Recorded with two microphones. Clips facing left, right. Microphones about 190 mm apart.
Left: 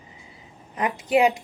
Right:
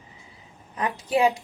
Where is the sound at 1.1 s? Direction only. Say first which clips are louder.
Left 2 dB; 20° left (ahead or behind).